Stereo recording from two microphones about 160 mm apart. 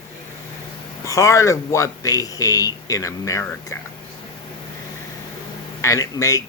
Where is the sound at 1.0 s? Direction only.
20° left (ahead or behind).